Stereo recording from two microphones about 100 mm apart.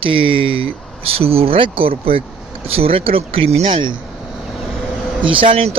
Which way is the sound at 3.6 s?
55° right (ahead or behind).